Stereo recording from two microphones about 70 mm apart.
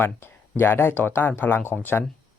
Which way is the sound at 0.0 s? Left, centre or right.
Left.